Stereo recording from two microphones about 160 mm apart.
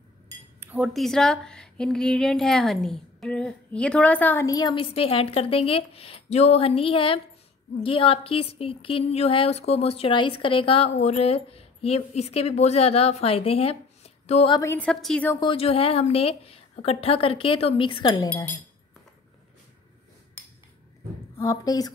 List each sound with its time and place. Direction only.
0.6 s a woman's voice: 10° right (ahead or behind); by 4.5 s 10° left (ahead or behind)
4.5 s a woman's voice: 25° left (ahead or behind); by 14.5 s 40° left (ahead or behind)
14.6 s a woman's voice: 10° left (ahead or behind)
15.4 s a woman's voice: 35° left (ahead or behind)
21.4 s a woman's voice: 20° left (ahead or behind)